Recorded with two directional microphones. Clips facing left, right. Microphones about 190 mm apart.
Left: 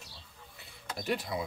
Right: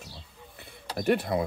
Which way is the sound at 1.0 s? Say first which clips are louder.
Right 8 dB; 55° right (ahead or behind).